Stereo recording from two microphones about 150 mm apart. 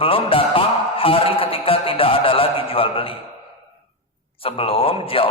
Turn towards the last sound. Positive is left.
turn(degrees=35)  # may be behind; listen again after turning